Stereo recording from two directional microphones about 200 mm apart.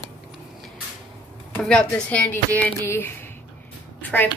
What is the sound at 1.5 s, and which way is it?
Speech, 5° left (ahead or behind).